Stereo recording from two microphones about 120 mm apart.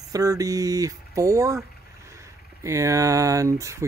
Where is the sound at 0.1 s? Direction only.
30° right (ahead or behind).